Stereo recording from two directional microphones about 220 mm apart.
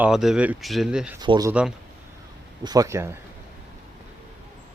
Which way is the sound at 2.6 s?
15° right (ahead or behind).